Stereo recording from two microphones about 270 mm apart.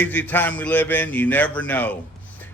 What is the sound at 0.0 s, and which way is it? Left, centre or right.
Speech, centre.